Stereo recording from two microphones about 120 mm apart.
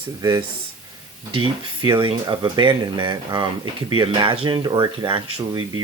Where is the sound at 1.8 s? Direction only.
40° right (ahead or behind).